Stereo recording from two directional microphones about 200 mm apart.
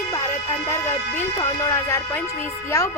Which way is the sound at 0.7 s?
10° left (ahead or behind).